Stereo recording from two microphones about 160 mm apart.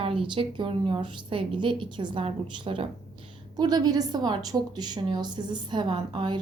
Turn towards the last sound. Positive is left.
turn(degrees=-30)  # may be behind; listen again after turning